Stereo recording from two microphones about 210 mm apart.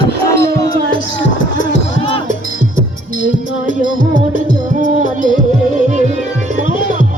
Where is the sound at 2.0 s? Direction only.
25° left (ahead or behind).